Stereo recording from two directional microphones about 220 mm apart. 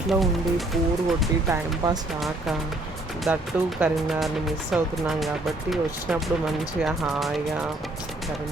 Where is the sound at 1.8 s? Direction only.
15° right (ahead or behind).